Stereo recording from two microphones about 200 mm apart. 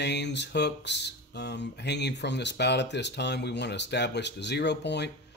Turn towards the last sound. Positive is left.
turn(degrees=60)  # may be behind; listen again after turning